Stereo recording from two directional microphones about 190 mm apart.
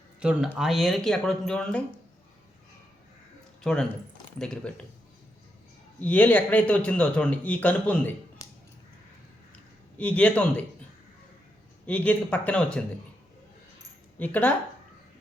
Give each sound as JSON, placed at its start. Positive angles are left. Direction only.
{"t": 0.2, "sound": "speech", "side_deg": -5}
{"t": 3.6, "sound": "speech", "side_deg": 5}
{"t": 6.0, "sound": "a man's voice", "side_deg": 10}
{"t": 10.0, "sound": "a man's voice", "side_deg": 5}
{"t": 11.9, "sound": "a man's voice", "side_deg": 5}
{"t": 14.2, "sound": "a man's voice", "side_deg": 10}